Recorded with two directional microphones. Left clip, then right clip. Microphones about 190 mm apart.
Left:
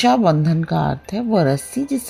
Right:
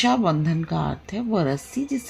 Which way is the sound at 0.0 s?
40° left (ahead or behind).